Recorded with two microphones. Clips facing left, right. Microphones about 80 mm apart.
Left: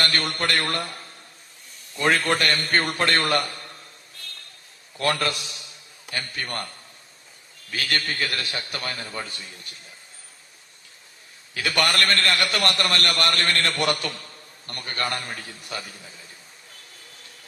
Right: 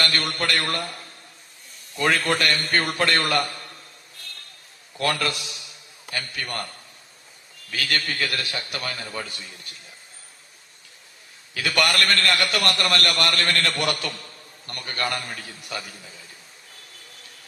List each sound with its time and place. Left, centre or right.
0.0 s a man's voice: left
2.0 s a man's voice: left
5.0 s a man's voice: left
7.7 s a man's voice: left
11.5 s a man's voice: left